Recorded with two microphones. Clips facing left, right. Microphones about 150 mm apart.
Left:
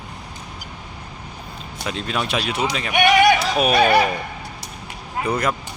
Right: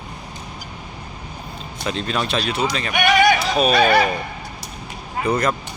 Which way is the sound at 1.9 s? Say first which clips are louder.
Right 2 dB; 10° left (ahead or behind).